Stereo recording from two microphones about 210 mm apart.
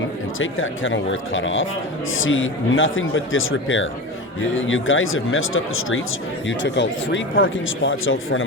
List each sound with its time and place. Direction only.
0.3 s speech: 70° left (ahead or behind)
6.5 s speech: 60° left (ahead or behind)